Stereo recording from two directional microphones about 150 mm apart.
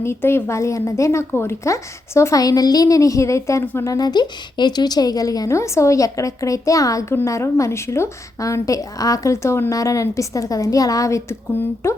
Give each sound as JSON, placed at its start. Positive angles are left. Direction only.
{"t": 0.0, "sound": "a woman's voice", "side_deg": 15}